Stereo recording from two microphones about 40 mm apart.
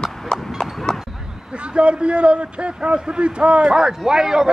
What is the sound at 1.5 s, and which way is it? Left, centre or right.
A man's voice, right.